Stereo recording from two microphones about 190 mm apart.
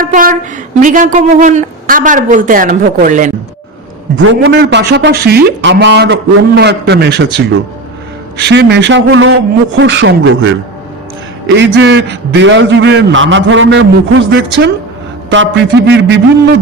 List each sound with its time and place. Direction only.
0.0 s a sound: 45° right (ahead or behind)
0.8 s a woman's voice: 40° right (ahead or behind)
4.2 s a man's voice: 70° right (ahead or behind)
8.4 s a man's voice: 65° right (ahead or behind)